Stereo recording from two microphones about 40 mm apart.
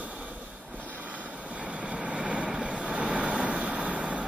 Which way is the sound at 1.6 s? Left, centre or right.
Right.